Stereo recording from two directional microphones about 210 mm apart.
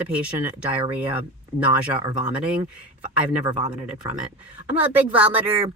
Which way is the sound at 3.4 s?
20° right (ahead or behind).